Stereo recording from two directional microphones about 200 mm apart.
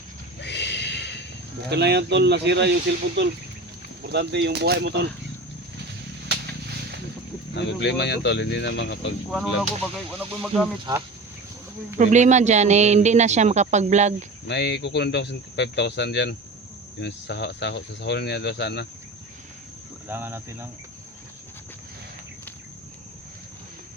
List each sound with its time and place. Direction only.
0.3 s a sound: 60° left (ahead or behind)
1.7 s speech: 55° right (ahead or behind)
4.0 s speech: 60° right (ahead or behind)
7.5 s speech: 60° left (ahead or behind)
9.3 s speech: 5° left (ahead or behind)
10.9 s speech: 20° right (ahead or behind)
11.9 s speech: 35° right (ahead or behind)
14.4 s speech: 60° left (ahead or behind)
20.1 s speech: 10° right (ahead or behind)